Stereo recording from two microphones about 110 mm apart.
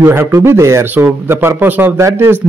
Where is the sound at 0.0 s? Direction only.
25° right (ahead or behind).